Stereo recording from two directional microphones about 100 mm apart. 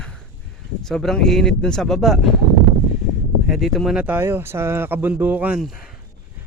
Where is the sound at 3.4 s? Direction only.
Centre (ahead or behind).